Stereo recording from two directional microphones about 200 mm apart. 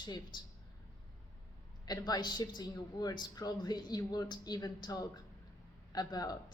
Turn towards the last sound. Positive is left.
turn(degrees=20)  # may be behind; listen again after turning